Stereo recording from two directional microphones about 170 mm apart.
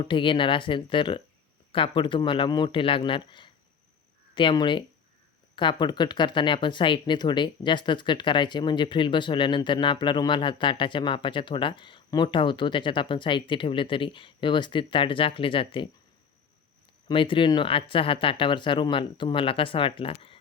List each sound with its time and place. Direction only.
0.0 s speech: 30° left (ahead or behind)
17.1 s speech: 30° left (ahead or behind)